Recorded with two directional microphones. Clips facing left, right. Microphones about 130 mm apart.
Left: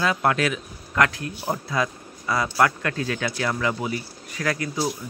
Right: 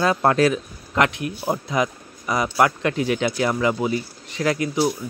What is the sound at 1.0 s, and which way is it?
Speech, 20° right (ahead or behind).